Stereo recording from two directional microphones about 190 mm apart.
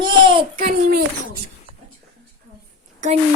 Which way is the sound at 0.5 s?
55° right (ahead or behind).